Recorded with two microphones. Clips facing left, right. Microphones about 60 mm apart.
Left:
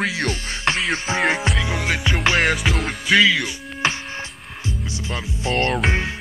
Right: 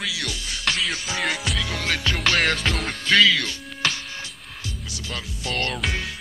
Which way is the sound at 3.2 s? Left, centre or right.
Centre.